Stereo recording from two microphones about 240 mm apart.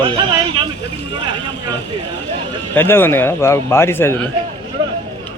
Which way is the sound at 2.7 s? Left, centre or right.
Centre.